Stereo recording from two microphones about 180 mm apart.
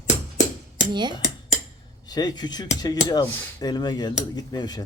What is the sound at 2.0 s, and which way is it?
Speech, 20° left (ahead or behind).